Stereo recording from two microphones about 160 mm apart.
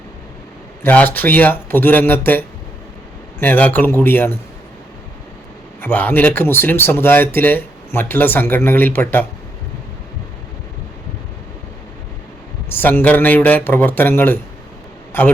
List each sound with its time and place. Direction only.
0.8 s speech: 10° left (ahead or behind)
3.4 s speech: 10° left (ahead or behind)
5.8 s speech: 10° left (ahead or behind)
12.6 s a man's voice: 10° left (ahead or behind)